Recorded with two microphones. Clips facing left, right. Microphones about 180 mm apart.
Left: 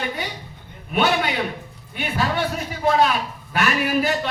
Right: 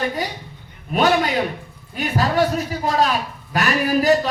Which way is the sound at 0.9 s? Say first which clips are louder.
Right 3 dB; 40° right (ahead or behind).